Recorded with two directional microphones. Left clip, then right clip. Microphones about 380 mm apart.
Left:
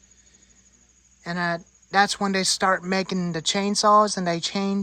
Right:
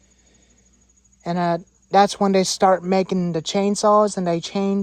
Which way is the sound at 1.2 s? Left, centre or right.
Centre.